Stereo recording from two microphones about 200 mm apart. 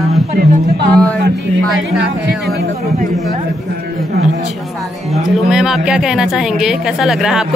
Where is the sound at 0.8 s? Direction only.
5° left (ahead or behind).